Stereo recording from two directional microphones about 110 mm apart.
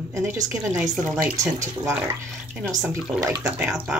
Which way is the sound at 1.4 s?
30° right (ahead or behind).